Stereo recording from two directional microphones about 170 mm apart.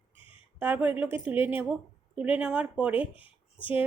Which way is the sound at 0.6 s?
10° right (ahead or behind).